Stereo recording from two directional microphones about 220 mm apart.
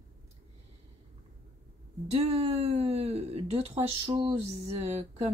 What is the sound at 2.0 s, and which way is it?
Speech, 30° right (ahead or behind).